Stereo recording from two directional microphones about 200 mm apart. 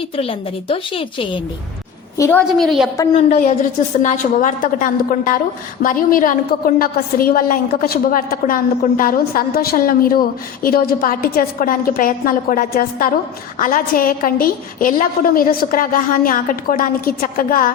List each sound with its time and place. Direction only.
0.2 s a woman's voice: 30° left (ahead or behind)
2.1 s a woman's voice: 15° left (ahead or behind)
2.6 s a woman's voice: centre (ahead or behind)
3.2 s a woman's voice: 30° left (ahead or behind)